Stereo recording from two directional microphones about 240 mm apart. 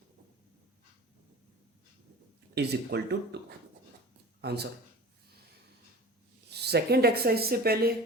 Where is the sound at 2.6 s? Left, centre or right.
Right.